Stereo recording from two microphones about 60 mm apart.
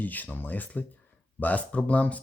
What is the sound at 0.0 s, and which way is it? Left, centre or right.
Speech, left.